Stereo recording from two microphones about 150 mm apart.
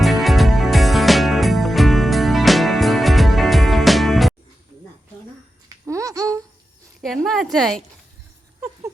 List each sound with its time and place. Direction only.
0.0 s music: centre (ahead or behind)
5.6 s a sound: 20° right (ahead or behind)
7.0 s speech: centre (ahead or behind)